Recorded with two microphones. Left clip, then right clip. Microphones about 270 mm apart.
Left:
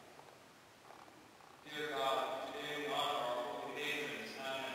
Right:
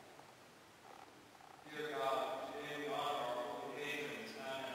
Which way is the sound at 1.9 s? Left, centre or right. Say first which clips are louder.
Left 2 dB; centre.